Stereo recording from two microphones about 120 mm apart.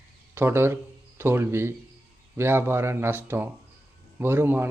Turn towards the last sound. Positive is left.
turn(degrees=-20)  # may be behind; listen again after turning